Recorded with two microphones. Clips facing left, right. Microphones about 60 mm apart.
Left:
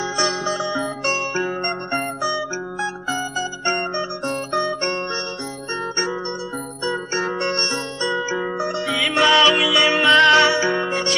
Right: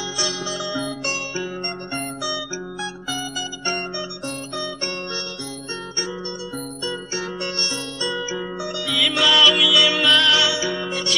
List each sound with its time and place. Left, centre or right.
0.0 s music: left
6.8 s music: left